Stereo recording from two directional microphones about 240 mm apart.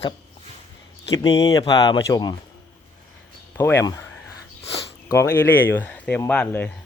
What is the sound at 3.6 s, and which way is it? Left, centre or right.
Speech, centre.